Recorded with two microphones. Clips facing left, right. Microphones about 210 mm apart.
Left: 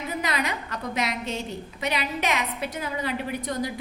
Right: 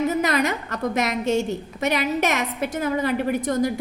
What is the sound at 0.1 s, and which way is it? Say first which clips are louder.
A woman's voice: right 7 dB; 45° right (ahead or behind).